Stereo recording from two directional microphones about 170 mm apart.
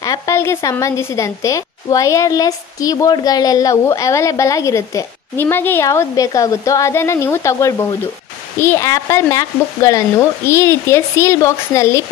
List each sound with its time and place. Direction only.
0.0 s speech: 20° left (ahead or behind)